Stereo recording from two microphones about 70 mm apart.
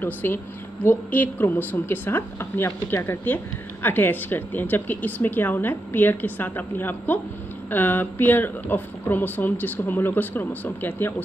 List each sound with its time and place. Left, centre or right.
0.0 s speech: left